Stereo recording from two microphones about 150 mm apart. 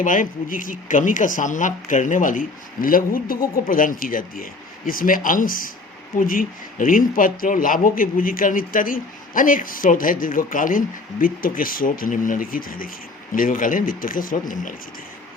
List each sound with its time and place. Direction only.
0.0 s speech: 65° left (ahead or behind)